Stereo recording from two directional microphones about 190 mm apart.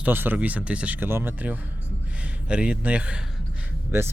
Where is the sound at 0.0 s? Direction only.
10° right (ahead or behind).